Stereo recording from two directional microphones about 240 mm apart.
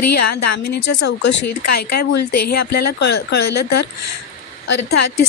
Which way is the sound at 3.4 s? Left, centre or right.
Left.